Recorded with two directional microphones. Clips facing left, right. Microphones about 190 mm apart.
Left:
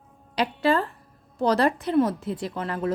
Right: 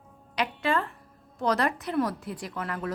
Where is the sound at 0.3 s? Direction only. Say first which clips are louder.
Left 5 dB; 35° left (ahead or behind).